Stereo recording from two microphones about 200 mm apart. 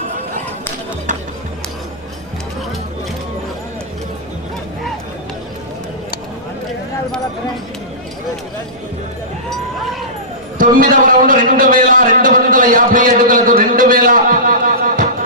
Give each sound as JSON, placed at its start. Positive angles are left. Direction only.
{"t": 10.8, "sound": "a man's voice", "side_deg": -45}